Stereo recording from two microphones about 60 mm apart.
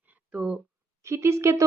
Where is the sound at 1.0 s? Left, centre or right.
Right.